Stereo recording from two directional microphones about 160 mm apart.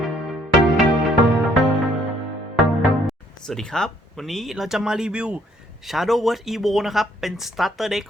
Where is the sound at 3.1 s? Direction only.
5° left (ahead or behind).